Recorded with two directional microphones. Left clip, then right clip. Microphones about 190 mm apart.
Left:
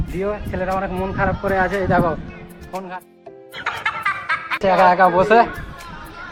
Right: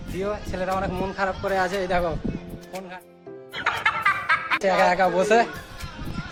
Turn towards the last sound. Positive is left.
turn(degrees=-5)  # may be behind; listen again after turning